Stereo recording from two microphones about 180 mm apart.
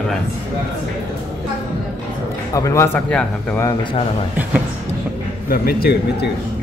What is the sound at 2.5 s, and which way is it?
Speech, 15° left (ahead or behind).